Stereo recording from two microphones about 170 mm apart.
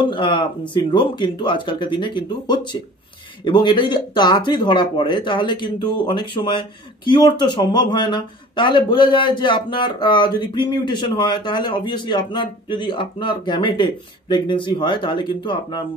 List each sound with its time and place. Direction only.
0.0 s speech: 30° left (ahead or behind)